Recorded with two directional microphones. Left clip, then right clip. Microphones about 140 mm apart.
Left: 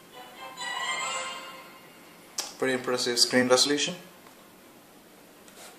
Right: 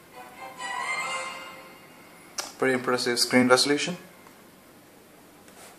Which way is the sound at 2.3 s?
15° right (ahead or behind).